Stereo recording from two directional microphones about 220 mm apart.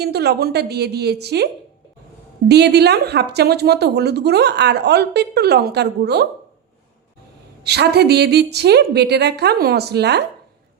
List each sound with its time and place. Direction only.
0.0 s a woman's voice: 45° right (ahead or behind)
2.5 s a woman's voice: 50° right (ahead or behind)
7.6 s a woman's voice: 45° right (ahead or behind)